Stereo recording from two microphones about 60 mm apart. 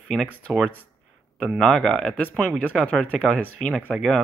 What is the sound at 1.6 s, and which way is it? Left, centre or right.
Speech, centre.